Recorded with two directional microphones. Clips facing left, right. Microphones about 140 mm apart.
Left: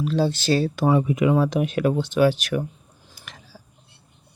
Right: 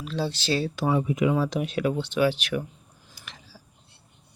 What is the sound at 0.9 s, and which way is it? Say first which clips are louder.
Speech: left 3 dB; 70° left (ahead or behind).